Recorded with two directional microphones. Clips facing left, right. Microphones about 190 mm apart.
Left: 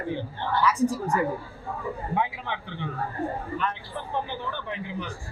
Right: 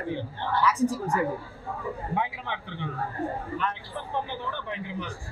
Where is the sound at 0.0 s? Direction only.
20° left (ahead or behind).